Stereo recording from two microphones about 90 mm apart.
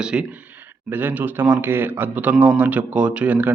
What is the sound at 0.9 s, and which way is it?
Speech, 20° right (ahead or behind).